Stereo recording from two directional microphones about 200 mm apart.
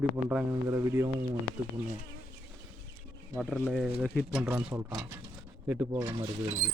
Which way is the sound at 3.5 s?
Centre (ahead or behind).